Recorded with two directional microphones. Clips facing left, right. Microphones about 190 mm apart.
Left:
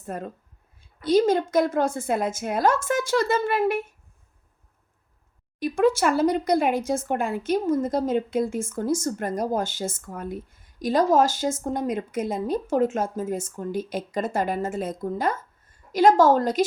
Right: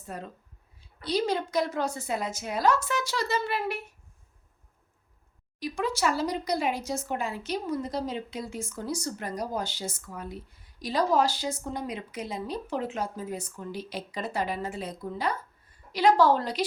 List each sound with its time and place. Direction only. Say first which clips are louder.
0.0 s speech: left 6 dB; 50° left (ahead or behind)
5.5 s speech: left 9 dB; 55° left (ahead or behind)